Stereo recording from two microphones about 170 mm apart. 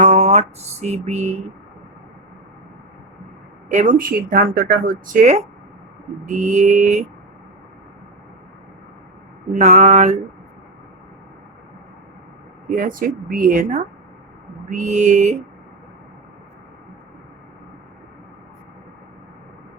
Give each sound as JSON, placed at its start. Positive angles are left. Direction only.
{"t": 0.0, "sound": "a sound", "side_deg": -40}
{"t": 3.7, "sound": "a woman's voice", "side_deg": -45}
{"t": 9.5, "sound": "a woman's voice", "side_deg": -45}
{"t": 12.6, "sound": "a woman's voice", "side_deg": -50}